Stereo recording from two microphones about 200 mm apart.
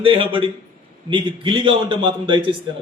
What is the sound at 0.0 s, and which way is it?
A man's voice, 25° right (ahead or behind).